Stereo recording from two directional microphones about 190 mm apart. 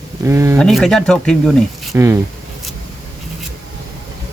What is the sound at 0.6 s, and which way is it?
Speech, centre (ahead or behind).